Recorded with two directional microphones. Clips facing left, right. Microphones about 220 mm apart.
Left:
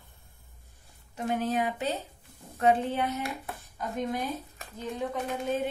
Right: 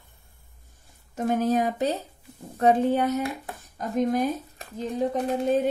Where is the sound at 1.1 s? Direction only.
45° right (ahead or behind).